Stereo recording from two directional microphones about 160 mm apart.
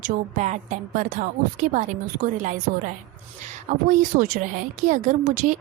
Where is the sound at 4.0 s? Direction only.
55° right (ahead or behind).